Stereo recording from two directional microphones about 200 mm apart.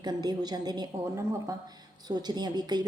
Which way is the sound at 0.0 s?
20° right (ahead or behind).